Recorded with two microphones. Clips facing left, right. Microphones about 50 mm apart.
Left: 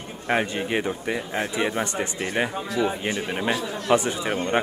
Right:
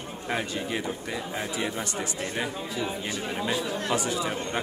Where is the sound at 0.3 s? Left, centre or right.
Left.